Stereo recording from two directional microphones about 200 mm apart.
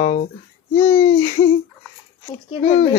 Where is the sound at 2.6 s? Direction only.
35° left (ahead or behind).